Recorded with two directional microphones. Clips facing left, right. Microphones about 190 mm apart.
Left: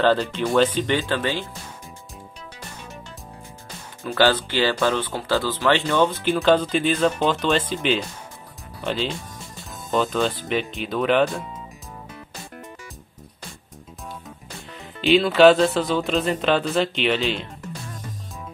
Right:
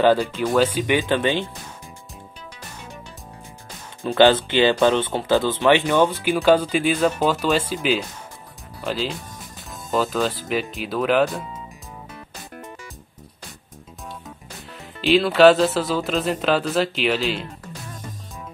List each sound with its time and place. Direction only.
0.0 s speech: 10° right (ahead or behind)
4.0 s speech: 20° right (ahead or behind); by 11.4 s 5° right (ahead or behind)
15.0 s speech: centre (ahead or behind)